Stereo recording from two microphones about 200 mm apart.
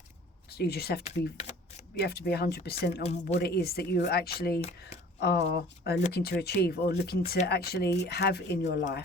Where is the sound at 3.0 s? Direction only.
30° left (ahead or behind).